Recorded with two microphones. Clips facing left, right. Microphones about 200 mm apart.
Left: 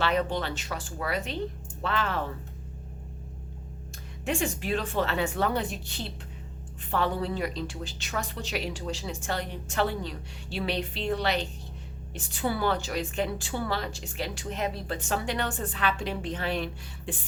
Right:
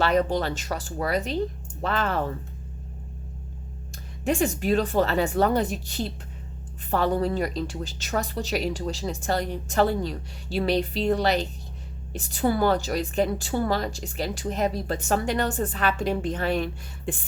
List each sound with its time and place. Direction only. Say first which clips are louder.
0.0 s a woman's voice: right 5 dB; 40° right (ahead or behind)
4.3 s a woman's voice: right 6 dB; 40° right (ahead or behind)